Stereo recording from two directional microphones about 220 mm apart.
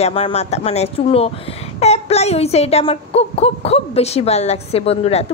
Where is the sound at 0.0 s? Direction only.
25° left (ahead or behind).